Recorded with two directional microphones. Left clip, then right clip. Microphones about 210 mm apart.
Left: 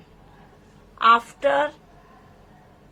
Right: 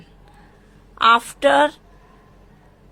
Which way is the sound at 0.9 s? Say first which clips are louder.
Right 2 dB; 50° right (ahead or behind).